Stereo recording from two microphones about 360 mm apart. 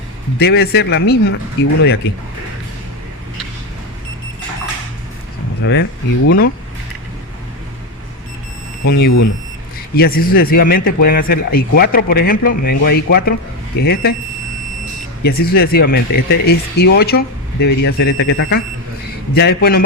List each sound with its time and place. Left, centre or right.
0.3 s speech: left
5.6 s speech: left
8.9 s speech: left
15.2 s speech: left